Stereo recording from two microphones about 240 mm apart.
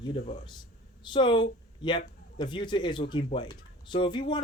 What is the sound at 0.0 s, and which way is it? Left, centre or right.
Speech, left.